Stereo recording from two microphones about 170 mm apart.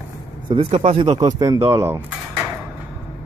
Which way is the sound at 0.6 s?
40° right (ahead or behind).